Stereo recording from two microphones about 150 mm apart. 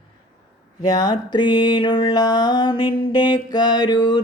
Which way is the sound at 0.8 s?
25° left (ahead or behind).